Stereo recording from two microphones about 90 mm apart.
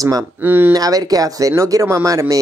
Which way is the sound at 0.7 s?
45° right (ahead or behind).